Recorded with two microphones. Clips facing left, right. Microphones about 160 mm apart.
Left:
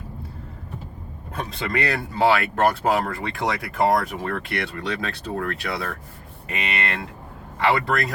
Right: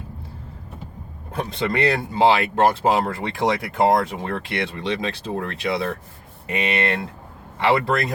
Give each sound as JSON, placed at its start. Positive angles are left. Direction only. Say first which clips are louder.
{"t": 1.3, "sound": "speech", "louder": "right 3 dB", "side_deg": -30}